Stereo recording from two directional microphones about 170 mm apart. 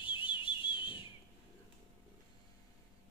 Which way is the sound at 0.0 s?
30° left (ahead or behind).